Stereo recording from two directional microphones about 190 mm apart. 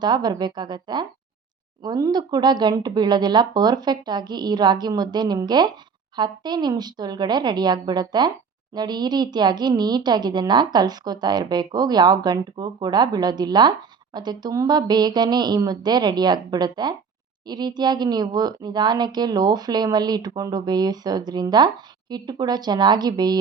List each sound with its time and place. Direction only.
0.0 s a woman's voice: 20° right (ahead or behind)